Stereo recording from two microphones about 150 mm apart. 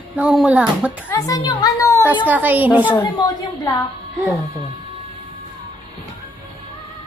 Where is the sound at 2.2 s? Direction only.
10° right (ahead or behind).